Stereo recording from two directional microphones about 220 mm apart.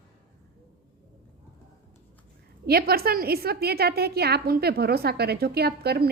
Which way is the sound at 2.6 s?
45° right (ahead or behind).